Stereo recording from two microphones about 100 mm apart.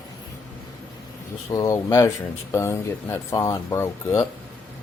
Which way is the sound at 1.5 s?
35° left (ahead or behind).